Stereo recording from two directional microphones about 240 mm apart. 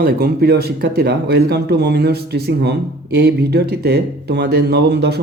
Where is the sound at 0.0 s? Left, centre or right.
Right.